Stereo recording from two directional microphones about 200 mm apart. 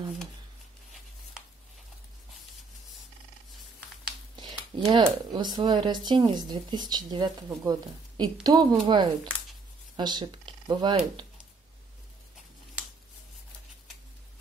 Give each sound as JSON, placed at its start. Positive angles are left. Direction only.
{"t": 4.4, "sound": "speech", "side_deg": -20}